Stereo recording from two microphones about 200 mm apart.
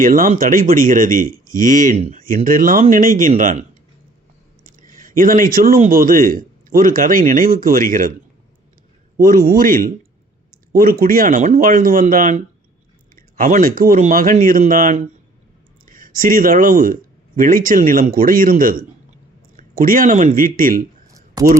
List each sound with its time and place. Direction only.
0.0 s speech: 45° right (ahead or behind)
4.9 s speech: 45° right (ahead or behind)
9.2 s speech: 45° right (ahead or behind)
21.4 s speech: 20° right (ahead or behind)